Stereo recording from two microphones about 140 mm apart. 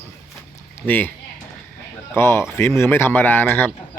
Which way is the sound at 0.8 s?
15° left (ahead or behind).